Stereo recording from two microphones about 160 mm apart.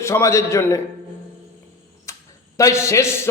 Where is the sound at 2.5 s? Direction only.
20° left (ahead or behind).